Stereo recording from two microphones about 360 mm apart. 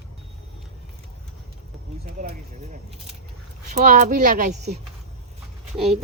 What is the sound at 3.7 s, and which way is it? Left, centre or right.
Speech, right.